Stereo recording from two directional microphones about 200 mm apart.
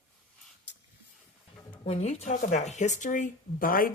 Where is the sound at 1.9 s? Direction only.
35° left (ahead or behind).